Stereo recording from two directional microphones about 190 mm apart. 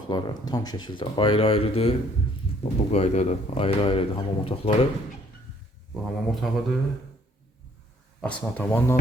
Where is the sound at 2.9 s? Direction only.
35° left (ahead or behind).